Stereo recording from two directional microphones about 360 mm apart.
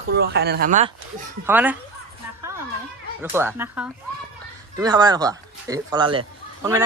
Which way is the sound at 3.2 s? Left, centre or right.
Centre.